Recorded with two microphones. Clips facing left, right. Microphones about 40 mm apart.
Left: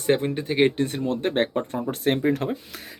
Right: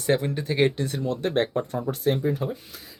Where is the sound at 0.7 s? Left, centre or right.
Left.